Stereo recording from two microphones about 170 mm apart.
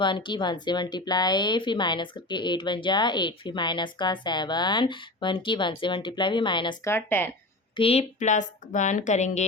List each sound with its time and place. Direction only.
0.0 s a woman's voice: 30° left (ahead or behind)
6.8 s speech: 15° left (ahead or behind)
7.8 s a woman's voice: 35° left (ahead or behind)